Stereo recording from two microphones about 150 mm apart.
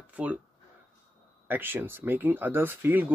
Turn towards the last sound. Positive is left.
turn(degrees=-15)  # may be behind; listen again after turning